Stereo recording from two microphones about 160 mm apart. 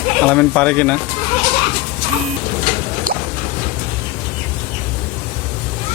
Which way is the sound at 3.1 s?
60° right (ahead or behind).